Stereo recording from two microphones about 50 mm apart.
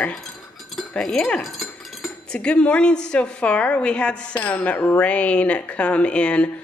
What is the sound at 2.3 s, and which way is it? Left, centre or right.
A woman's voice, left.